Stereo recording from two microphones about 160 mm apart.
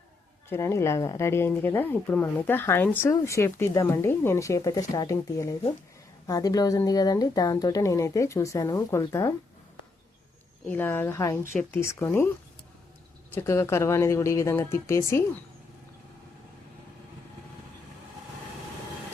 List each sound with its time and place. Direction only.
0.5 s speech: 15° left (ahead or behind)
10.7 s speech: 15° left (ahead or behind)
13.3 s speech: 15° left (ahead or behind)